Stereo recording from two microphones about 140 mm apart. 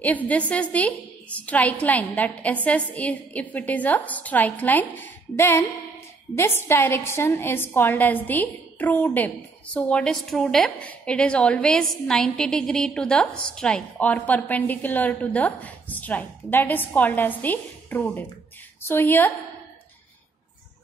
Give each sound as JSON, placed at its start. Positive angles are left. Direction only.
{"t": 0.0, "sound": "a woman's voice", "side_deg": 10}